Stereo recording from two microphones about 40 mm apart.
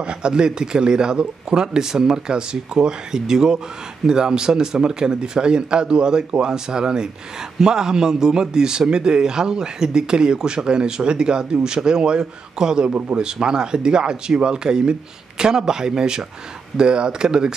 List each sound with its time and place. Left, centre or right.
0.0 s speech: right